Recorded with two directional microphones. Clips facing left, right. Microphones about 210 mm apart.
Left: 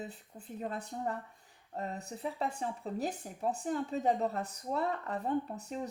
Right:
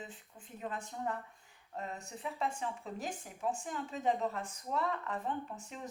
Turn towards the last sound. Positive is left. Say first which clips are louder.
# left 6 dB
turn(degrees=40)  # may be behind; listen again after turning